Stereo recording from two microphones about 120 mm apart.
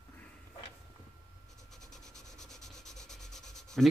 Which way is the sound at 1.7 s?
5° left (ahead or behind).